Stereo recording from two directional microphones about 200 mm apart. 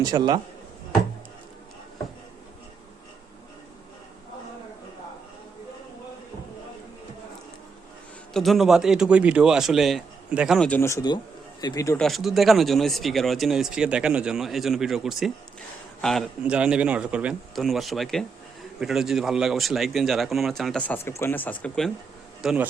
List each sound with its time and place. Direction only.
0.0 s a man's voice: 20° right (ahead or behind)
8.3 s speech: centre (ahead or behind); by 11.9 s 15° left (ahead or behind)
11.9 s speech: centre (ahead or behind)